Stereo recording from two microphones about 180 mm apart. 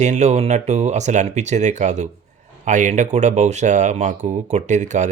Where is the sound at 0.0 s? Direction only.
40° right (ahead or behind).